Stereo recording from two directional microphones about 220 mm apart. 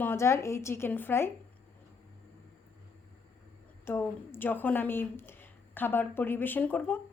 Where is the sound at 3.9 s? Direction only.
10° left (ahead or behind).